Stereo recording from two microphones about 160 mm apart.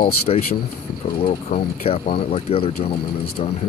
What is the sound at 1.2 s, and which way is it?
Speech, 40° left (ahead or behind).